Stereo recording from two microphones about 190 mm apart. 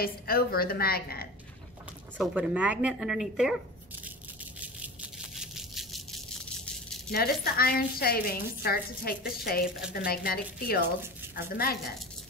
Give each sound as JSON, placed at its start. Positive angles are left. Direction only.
{"t": 0.0, "sound": "a woman's voice", "side_deg": 50}
{"t": 2.1, "sound": "speech", "side_deg": -5}
{"t": 5.4, "sound": "rattle", "side_deg": 0}
{"t": 7.1, "sound": "a woman's voice", "side_deg": 55}